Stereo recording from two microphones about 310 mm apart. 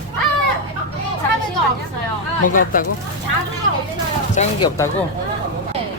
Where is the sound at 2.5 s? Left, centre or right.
Left.